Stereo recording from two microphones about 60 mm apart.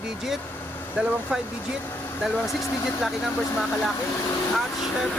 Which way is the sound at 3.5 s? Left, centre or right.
Centre.